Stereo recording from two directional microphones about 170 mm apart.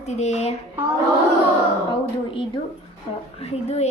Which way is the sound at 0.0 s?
40° left (ahead or behind).